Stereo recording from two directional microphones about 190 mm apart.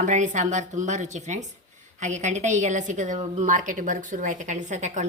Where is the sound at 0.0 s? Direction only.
40° right (ahead or behind).